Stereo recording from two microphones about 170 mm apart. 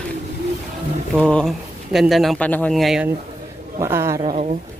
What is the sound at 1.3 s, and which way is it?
Speech, centre (ahead or behind).